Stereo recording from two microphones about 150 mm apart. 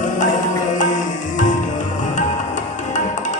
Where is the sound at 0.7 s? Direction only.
60° left (ahead or behind).